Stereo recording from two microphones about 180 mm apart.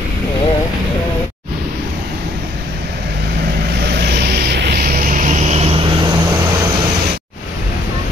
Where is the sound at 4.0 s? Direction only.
65° right (ahead or behind); by 6.1 s 25° right (ahead or behind).